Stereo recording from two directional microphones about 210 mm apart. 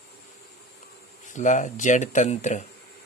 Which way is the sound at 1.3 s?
35° left (ahead or behind).